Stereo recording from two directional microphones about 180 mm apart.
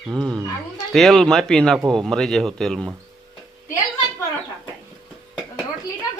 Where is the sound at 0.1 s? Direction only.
5° left (ahead or behind).